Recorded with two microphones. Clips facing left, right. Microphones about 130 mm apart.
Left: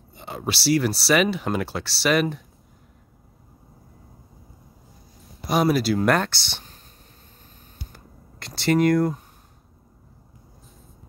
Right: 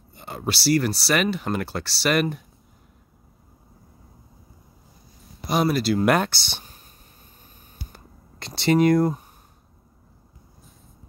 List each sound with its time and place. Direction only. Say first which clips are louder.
0.1 s speech: even; centre (ahead or behind)
5.5 s speech: left 1 dB; 5° left (ahead or behind)
6.0 s speech: right 1 dB; 10° right (ahead or behind)
7.9 s a sound: left 1 dB; 20° right (ahead or behind)